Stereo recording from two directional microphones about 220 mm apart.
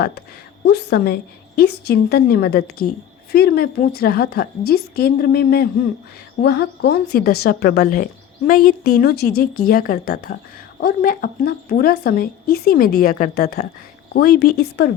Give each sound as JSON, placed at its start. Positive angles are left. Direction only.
{"t": 0.6, "sound": "speech", "side_deg": 50}